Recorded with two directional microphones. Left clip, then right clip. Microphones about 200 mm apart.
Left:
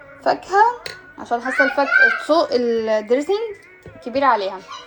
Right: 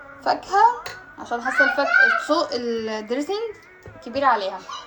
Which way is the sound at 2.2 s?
20° left (ahead or behind).